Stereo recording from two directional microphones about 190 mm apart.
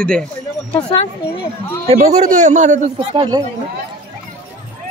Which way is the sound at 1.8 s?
35° right (ahead or behind).